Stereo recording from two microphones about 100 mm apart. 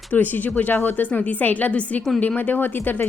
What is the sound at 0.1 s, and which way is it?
A woman's voice, 15° left (ahead or behind).